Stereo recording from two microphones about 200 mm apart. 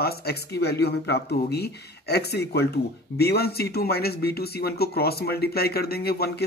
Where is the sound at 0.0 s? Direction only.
50° left (ahead or behind).